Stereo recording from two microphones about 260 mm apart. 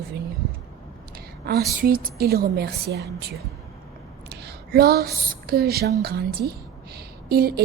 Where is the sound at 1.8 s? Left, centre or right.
Right.